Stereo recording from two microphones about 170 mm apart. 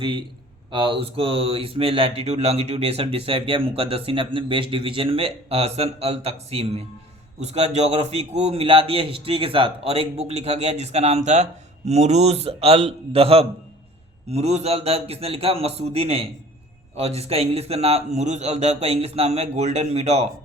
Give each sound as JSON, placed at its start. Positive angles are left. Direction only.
{"t": 0.0, "sound": "a man's voice", "side_deg": -30}